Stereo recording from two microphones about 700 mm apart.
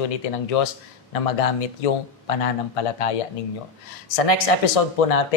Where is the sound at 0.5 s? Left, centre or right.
Left.